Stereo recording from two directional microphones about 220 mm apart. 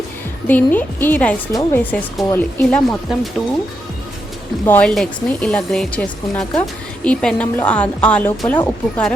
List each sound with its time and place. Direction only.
0.4 s speech: 10° left (ahead or behind)
4.6 s speech: 5° left (ahead or behind)